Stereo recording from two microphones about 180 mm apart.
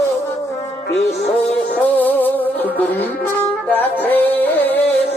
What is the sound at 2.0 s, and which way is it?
Music, 10° left (ahead or behind).